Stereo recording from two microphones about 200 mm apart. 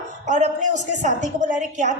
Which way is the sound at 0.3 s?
35° right (ahead or behind).